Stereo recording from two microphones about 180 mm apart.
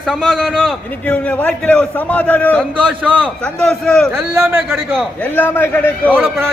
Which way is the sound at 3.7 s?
5° left (ahead or behind).